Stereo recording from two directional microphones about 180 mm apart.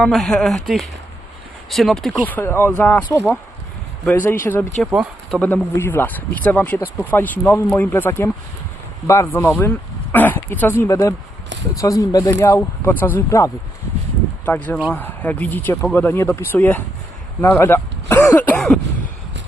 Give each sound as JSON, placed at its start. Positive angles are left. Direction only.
{"t": 0.0, "sound": "speech", "side_deg": 5}
{"t": 4.9, "sound": "speech", "side_deg": 0}
{"t": 5.5, "sound": "speech", "side_deg": 10}
{"t": 14.9, "sound": "speech", "side_deg": 10}